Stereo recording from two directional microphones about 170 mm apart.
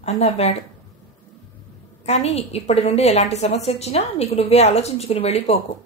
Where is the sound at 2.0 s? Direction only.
40° left (ahead or behind).